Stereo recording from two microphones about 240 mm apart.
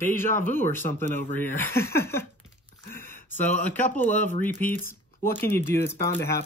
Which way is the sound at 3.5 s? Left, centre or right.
Left.